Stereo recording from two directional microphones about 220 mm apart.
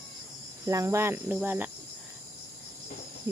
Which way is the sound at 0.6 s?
15° right (ahead or behind).